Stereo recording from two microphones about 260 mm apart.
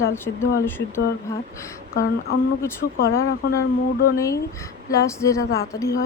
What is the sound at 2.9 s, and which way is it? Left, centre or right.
Speech, left.